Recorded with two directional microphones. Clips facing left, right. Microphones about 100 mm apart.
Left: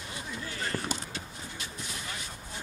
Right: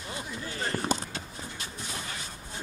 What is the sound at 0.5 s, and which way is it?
Basketball bounce, 30° right (ahead or behind).